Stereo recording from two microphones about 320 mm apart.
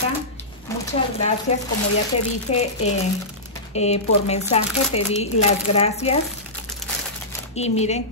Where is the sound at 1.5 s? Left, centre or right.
Centre.